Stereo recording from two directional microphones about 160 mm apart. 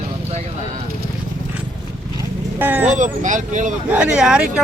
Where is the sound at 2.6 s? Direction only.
10° right (ahead or behind).